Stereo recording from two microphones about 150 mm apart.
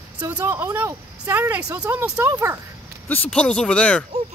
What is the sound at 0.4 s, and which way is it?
Speech, 15° right (ahead or behind).